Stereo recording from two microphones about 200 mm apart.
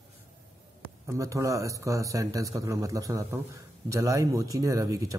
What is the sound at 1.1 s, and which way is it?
Speech, 15° right (ahead or behind).